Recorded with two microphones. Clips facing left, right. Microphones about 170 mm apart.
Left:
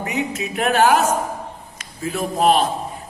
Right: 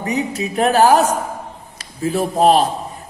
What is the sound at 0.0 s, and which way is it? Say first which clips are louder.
Music: right 3 dB; 35° right (ahead or behind).